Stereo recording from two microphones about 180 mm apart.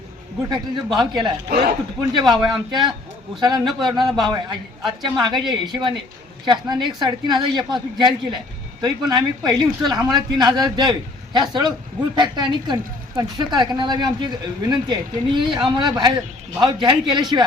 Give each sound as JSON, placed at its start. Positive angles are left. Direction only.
{"t": 0.5, "sound": "a woman's voice", "side_deg": -25}
{"t": 1.5, "sound": "speech", "side_deg": -55}
{"t": 2.0, "sound": "a woman's voice", "side_deg": -25}